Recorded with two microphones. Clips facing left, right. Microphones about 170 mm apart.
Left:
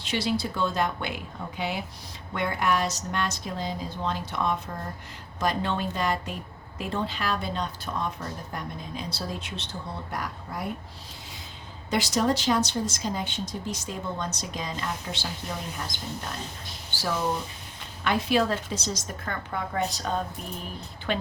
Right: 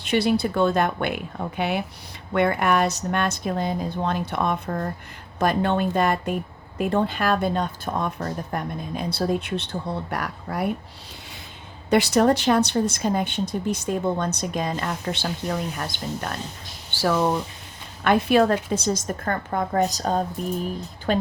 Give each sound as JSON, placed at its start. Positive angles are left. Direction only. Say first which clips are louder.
{"t": 0.0, "sound": "speech", "louder": "right 7 dB", "side_deg": -60}
{"t": 11.9, "sound": "speech", "louder": "right 7 dB", "side_deg": -60}
{"t": 18.0, "sound": "a woman's voice", "louder": "right 6 dB", "side_deg": -55}